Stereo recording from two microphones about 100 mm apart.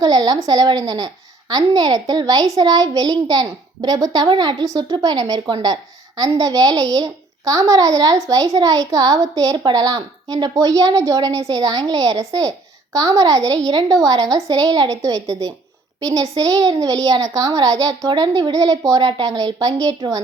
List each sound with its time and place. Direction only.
0.0 s a sound: 40° right (ahead or behind)
0.4 s a child's voice: 40° right (ahead or behind)
18.1 s a child's voice: 45° right (ahead or behind)